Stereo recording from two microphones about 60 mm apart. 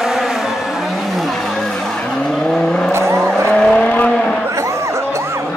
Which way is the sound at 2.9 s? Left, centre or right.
Right.